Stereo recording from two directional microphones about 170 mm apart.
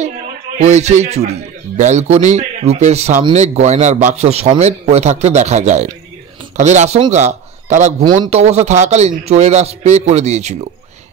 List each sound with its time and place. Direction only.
0.6 s a man's voice: 40° right (ahead or behind)